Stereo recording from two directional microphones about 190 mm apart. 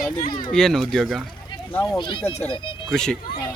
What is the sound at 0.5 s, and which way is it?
Speech, centre (ahead or behind).